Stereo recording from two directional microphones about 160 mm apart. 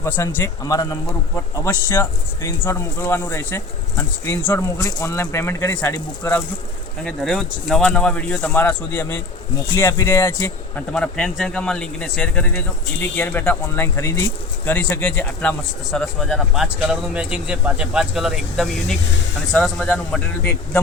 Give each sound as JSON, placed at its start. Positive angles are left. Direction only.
{"t": 0.0, "sound": "speech", "side_deg": 15}
{"t": 7.0, "sound": "speech", "side_deg": 0}
{"t": 10.9, "sound": "a man's voice", "side_deg": 5}